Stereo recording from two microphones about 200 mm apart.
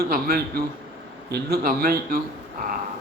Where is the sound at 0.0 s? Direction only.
50° right (ahead or behind).